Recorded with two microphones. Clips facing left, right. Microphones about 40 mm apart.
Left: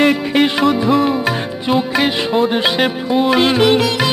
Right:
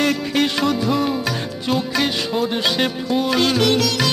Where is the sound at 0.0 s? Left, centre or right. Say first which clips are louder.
Left 5 dB; left.